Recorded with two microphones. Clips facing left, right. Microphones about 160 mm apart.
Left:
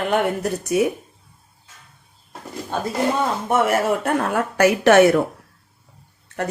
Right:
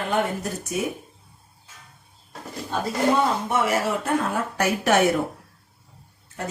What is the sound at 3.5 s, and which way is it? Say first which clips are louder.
A woman's voice: left 4 dB; 60° left (ahead or behind).